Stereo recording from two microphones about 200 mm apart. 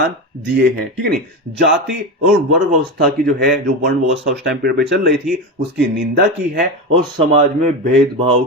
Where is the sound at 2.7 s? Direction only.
50° right (ahead or behind).